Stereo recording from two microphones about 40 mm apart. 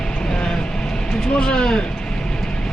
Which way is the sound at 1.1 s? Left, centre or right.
Left.